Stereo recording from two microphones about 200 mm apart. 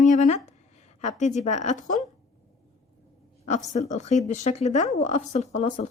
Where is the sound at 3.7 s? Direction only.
35° left (ahead or behind).